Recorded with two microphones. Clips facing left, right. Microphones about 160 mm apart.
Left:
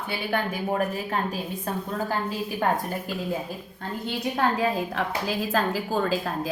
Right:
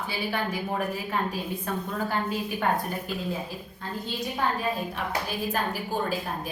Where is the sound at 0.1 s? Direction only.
50° left (ahead or behind).